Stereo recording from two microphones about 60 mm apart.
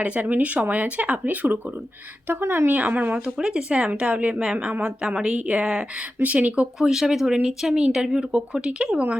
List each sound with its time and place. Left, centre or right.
0.0 s speech: right
3.3 s speech: centre
6.7 s speech: centre